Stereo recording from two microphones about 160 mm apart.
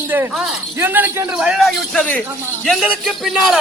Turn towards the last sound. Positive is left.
turn(degrees=0)  # may be behind; listen again after turning